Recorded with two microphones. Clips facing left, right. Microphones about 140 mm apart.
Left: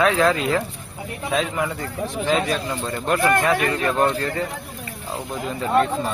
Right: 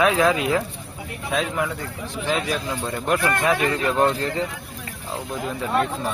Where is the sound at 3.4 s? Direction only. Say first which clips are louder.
Even; 20° right (ahead or behind).